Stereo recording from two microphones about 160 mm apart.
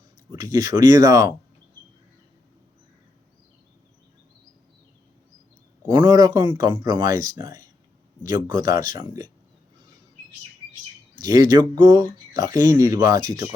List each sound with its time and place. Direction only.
0.3 s speech: 20° right (ahead or behind)
5.9 s speech: 25° right (ahead or behind)
11.2 s speech: 25° right (ahead or behind)